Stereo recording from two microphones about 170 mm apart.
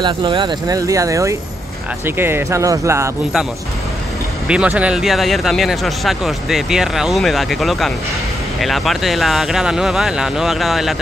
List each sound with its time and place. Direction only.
0.0 s speech: 30° right (ahead or behind)
4.5 s speech: 5° right (ahead or behind)